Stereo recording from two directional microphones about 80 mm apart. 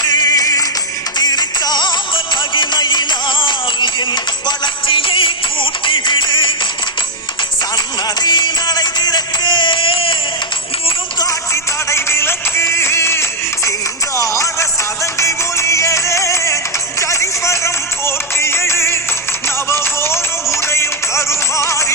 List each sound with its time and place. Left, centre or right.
0.0 s music: left
8.2 s music: left
11.5 s music: left